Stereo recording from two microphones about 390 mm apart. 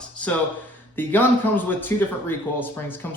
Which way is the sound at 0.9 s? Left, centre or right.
Centre.